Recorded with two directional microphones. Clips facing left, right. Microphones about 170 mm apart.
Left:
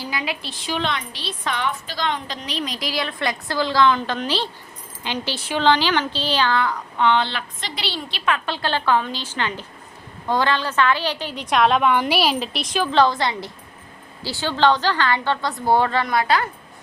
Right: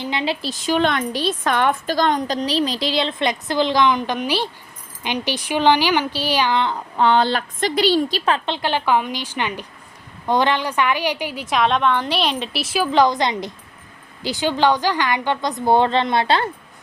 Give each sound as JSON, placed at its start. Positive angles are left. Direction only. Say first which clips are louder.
{"t": 0.0, "sound": "a woman's voice", "louder": "right 5 dB", "side_deg": -25}
{"t": 0.4, "sound": "a woman's voice", "louder": "right 6 dB", "side_deg": -45}
{"t": 7.0, "sound": "speech", "louder": "right 3 dB", "side_deg": -40}
{"t": 8.4, "sound": "a woman's voice", "louder": "right 1 dB", "side_deg": -20}